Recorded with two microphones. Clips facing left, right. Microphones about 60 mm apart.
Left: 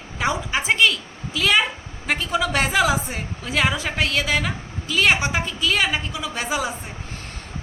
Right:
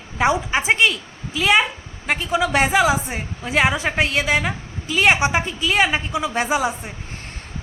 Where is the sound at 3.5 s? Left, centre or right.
Right.